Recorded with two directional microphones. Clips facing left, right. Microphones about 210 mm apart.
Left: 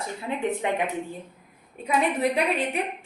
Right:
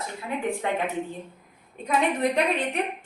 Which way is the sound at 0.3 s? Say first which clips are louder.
Even; 25° left (ahead or behind).